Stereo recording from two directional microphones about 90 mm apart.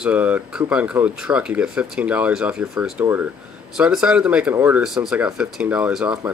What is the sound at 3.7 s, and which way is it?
Speech, 10° right (ahead or behind).